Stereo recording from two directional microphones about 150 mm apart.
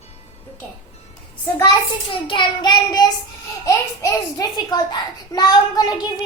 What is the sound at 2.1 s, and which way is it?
A child's voice, 35° left (ahead or behind).